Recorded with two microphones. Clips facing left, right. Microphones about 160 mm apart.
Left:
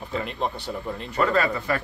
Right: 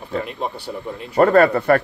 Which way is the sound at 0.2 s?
5° right (ahead or behind).